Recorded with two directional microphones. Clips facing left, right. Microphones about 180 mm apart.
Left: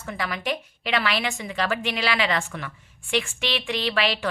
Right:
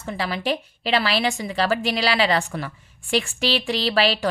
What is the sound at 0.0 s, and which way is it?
A woman's voice, 30° right (ahead or behind).